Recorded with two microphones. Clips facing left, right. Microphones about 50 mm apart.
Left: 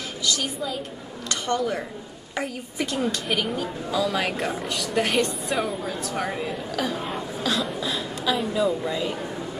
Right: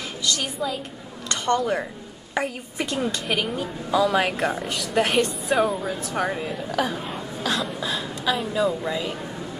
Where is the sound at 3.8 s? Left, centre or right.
Centre.